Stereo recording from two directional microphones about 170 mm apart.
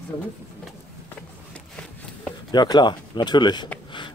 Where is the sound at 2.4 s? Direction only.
25° left (ahead or behind).